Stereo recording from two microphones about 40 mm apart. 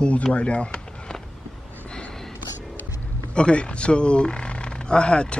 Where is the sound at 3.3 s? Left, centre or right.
Left.